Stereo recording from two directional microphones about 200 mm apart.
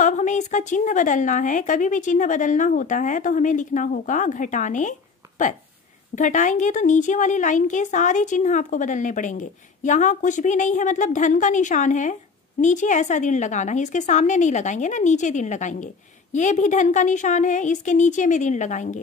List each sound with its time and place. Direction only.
0.0 s a woman's voice: 40° left (ahead or behind)